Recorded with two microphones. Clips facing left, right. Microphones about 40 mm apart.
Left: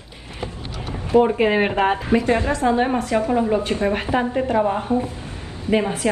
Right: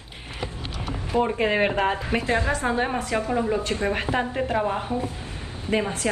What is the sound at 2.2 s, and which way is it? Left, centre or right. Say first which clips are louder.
Speech: left 4 dB; left.